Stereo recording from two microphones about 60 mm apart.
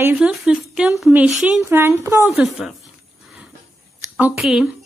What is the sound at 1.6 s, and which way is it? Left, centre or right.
Speech, right.